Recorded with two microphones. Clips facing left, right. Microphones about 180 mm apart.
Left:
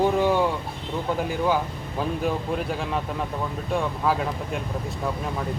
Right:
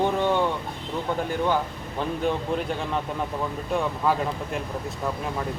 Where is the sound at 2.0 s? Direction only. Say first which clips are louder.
Even; 5° left (ahead or behind).